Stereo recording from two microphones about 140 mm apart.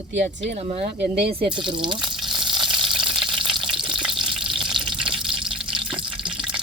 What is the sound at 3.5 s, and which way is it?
Frying, 35° right (ahead or behind).